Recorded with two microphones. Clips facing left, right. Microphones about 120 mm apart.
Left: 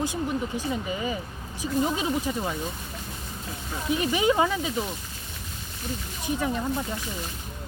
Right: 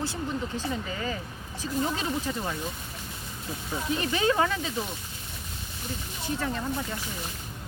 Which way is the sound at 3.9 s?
15° left (ahead or behind).